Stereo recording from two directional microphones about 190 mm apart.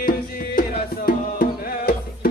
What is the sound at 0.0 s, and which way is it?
Music, 50° left (ahead or behind).